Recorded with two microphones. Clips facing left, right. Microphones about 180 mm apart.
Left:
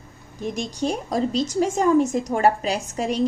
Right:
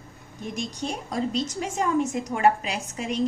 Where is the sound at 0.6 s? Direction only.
35° left (ahead or behind).